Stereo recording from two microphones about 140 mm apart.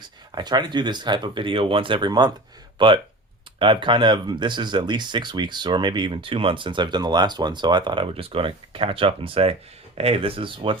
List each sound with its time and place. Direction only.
0.3 s speech: 30° right (ahead or behind)